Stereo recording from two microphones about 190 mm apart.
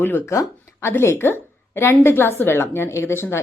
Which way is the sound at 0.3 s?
15° left (ahead or behind).